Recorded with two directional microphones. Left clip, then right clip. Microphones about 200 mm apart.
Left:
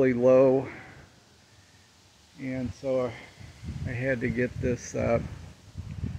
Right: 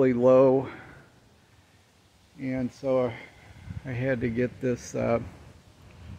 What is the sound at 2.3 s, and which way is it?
Speech, 15° right (ahead or behind).